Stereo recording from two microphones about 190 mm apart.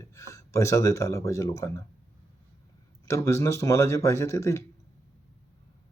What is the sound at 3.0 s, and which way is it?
Speech, 15° left (ahead or behind).